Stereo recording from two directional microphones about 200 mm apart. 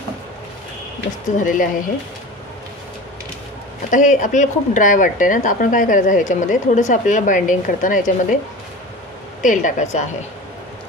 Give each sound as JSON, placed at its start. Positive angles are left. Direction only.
{"t": 1.4, "sound": "speech", "side_deg": 40}
{"t": 3.9, "sound": "speech", "side_deg": 40}
{"t": 9.4, "sound": "speech", "side_deg": 40}